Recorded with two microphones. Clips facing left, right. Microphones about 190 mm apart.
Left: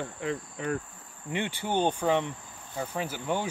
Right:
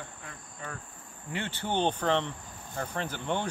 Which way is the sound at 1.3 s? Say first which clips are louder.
Left 3 dB; 15° left (ahead or behind).